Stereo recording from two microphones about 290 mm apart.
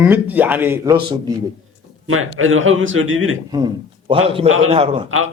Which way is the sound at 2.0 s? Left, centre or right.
Right.